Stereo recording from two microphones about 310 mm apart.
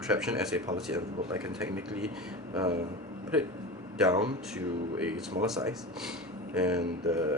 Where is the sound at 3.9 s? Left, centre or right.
Centre.